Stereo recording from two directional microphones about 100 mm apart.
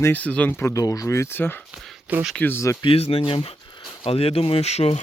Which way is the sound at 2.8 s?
70° left (ahead or behind).